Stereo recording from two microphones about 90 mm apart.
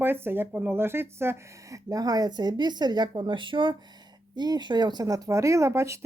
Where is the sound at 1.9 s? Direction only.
45° right (ahead or behind); by 3.7 s 65° right (ahead or behind).